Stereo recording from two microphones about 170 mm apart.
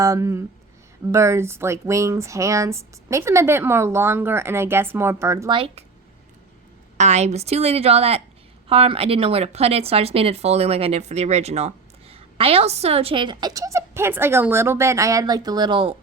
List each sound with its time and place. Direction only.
0.0 s speech: 20° right (ahead or behind)
6.9 s speech: 45° right (ahead or behind)